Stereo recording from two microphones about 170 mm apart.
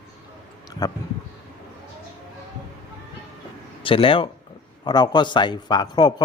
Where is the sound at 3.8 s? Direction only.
30° left (ahead or behind).